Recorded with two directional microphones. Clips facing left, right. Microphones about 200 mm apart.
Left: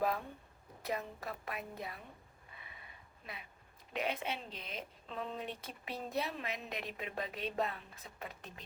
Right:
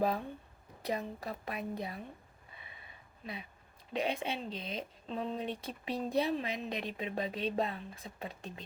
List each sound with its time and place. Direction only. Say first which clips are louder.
0.9 s a woman's voice: right 3 dB; 30° right (ahead or behind)
3.9 s a woman's voice: right 4 dB; 25° right (ahead or behind)